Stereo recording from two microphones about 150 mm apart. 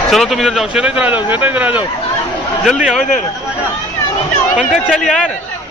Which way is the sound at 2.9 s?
60° left (ahead or behind).